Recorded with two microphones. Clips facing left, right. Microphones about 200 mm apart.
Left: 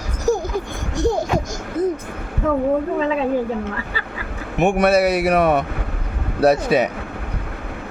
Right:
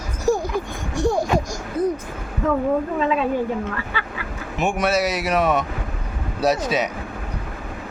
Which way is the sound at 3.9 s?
40° left (ahead or behind).